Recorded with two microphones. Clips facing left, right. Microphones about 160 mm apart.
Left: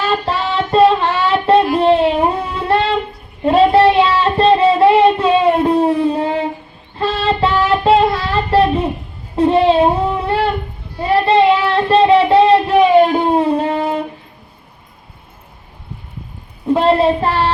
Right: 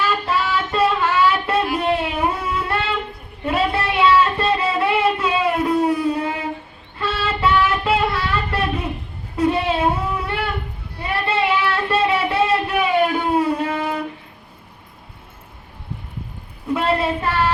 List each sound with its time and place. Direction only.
0.0 s child singing: 30° left (ahead or behind)
2.4 s music: 35° left (ahead or behind)
7.0 s child singing: 30° left (ahead or behind)
9.3 s a sound: 30° left (ahead or behind)
16.6 s child singing: 30° left (ahead or behind)